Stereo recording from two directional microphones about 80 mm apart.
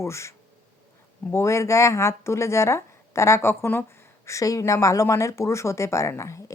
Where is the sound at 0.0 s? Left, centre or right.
Left.